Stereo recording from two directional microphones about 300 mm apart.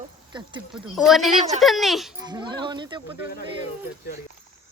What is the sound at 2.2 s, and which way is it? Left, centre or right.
Speech, centre.